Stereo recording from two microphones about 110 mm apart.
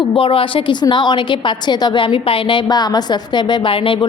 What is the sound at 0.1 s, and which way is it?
A woman's voice, 55° left (ahead or behind).